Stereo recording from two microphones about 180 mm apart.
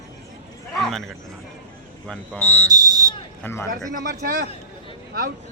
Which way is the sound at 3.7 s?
50° right (ahead or behind).